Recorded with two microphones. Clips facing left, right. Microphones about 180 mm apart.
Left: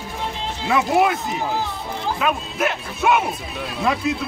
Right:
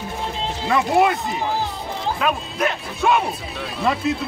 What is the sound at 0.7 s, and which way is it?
Speech, 5° left (ahead or behind).